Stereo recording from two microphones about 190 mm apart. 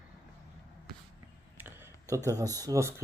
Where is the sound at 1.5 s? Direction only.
10° right (ahead or behind).